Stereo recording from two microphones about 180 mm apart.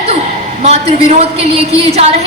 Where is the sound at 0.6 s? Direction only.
35° right (ahead or behind).